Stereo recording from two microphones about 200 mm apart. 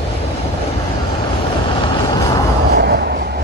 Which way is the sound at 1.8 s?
20° left (ahead or behind).